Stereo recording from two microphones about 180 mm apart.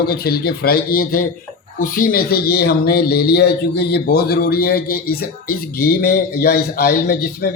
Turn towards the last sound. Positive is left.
turn(degrees=60)  # may be behind; listen again after turning